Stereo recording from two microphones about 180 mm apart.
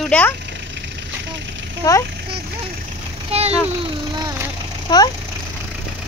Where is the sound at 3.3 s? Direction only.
35° right (ahead or behind).